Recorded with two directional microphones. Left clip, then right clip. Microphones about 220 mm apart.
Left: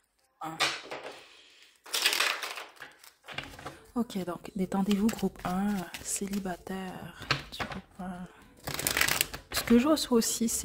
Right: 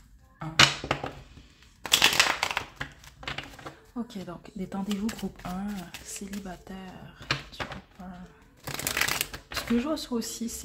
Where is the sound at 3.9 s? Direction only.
50° left (ahead or behind).